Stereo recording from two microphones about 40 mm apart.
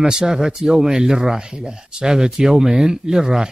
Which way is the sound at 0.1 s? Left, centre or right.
Centre.